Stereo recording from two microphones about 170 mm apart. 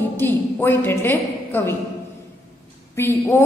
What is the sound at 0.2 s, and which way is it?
A woman's voice, 10° left (ahead or behind).